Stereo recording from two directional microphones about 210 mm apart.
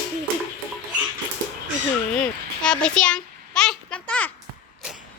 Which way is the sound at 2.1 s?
5° left (ahead or behind).